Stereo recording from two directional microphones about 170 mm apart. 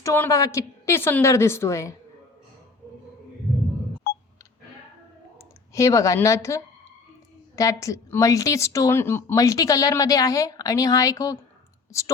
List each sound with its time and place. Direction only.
0.0 s a woman's voice: 15° left (ahead or behind)
5.4 s a woman's voice: 15° left (ahead or behind)